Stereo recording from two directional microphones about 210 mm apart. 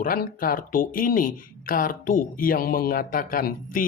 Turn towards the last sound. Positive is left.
turn(degrees=40)  # may be behind; listen again after turning